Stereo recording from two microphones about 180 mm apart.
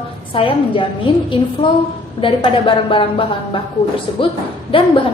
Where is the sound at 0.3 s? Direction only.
30° left (ahead or behind).